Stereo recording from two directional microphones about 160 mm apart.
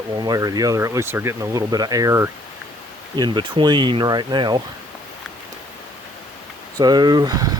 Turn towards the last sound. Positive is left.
turn(degrees=-25)  # may be behind; listen again after turning